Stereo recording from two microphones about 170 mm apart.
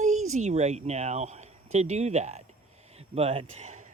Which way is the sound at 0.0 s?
45° right (ahead or behind).